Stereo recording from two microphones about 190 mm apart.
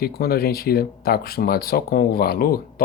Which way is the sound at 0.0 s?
55° left (ahead or behind).